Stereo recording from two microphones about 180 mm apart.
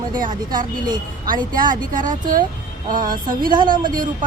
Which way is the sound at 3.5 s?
25° right (ahead or behind).